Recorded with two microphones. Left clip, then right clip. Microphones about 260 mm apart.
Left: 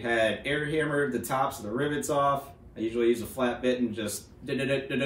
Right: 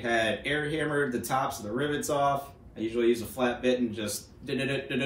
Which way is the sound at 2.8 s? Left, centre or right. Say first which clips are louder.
Even; centre.